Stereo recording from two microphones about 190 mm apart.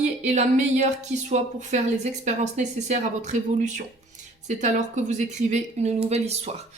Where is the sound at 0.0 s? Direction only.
35° right (ahead or behind).